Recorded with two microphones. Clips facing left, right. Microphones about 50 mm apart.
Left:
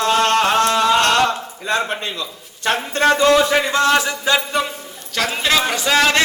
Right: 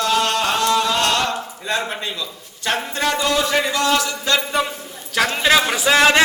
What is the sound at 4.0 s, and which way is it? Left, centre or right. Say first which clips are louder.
Speech: left 3 dB; left.